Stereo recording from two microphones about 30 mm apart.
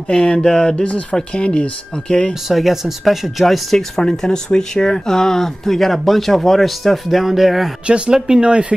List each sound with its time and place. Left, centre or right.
0.1 s a sound: left
1.3 s speech: left
2.4 s speech: centre
3.7 s a sound: centre
4.5 s speech: left; by 7.0 s centre
7.1 s speech: centre
8.1 s speech: right
8.5 s speech: right